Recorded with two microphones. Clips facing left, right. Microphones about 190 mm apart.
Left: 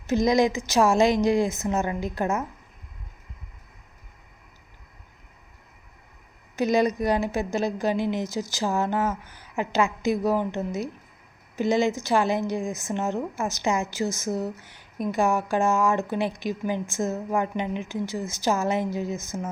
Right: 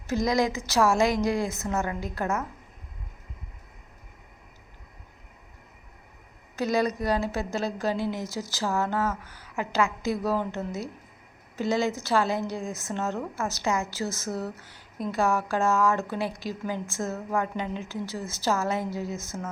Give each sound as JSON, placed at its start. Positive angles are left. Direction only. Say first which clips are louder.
{"t": 0.1, "sound": "a woman's voice", "louder": "left 4 dB", "side_deg": 20}
{"t": 6.6, "sound": "a woman's voice", "louder": "left 4 dB", "side_deg": 20}